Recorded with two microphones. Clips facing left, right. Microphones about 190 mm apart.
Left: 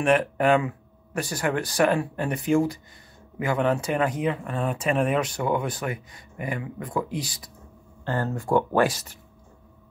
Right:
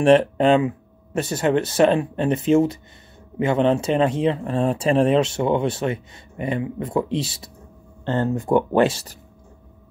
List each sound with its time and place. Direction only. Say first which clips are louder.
0.0 s speech: right 6 dB; 30° right (ahead or behind)